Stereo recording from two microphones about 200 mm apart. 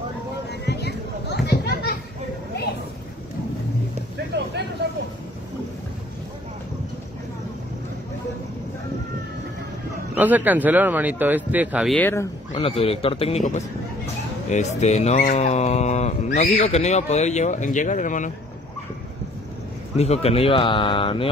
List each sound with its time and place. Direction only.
0.5 s a sound: 55° left (ahead or behind)
10.1 s speech: 10° right (ahead or behind)
12.0 s speech: 10° left (ahead or behind)
12.5 s speech: 30° left (ahead or behind)
20.0 s speech: 30° left (ahead or behind)